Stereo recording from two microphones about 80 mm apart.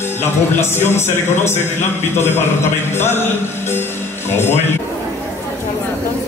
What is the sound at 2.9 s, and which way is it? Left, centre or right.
Female singing, left.